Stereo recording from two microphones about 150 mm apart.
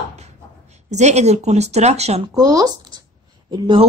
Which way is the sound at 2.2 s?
25° right (ahead or behind).